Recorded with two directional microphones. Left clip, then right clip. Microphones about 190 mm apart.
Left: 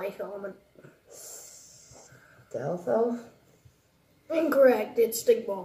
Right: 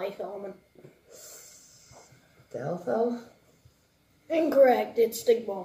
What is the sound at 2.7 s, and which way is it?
Speech, 15° left (ahead or behind).